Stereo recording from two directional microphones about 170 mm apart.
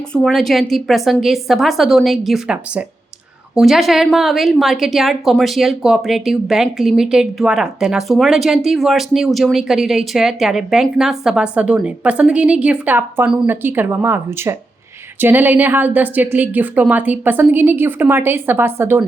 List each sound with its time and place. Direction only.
0.1 s a woman's voice: 5° left (ahead or behind); by 19.0 s 15° right (ahead or behind)